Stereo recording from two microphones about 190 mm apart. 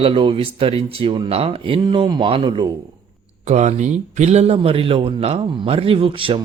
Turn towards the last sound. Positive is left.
turn(degrees=-30)  # may be behind; listen again after turning